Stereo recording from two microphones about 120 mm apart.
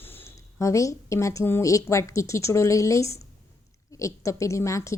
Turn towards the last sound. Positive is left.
turn(degrees=25)  # may be behind; listen again after turning